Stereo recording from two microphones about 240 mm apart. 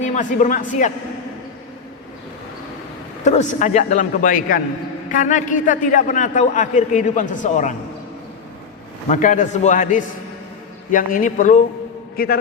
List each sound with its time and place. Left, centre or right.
0.0 s speech: left
3.2 s a man's voice: left
9.0 s a man's voice: left